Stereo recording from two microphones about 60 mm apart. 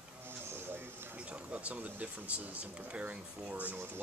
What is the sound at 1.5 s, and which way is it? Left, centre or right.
Speech, right.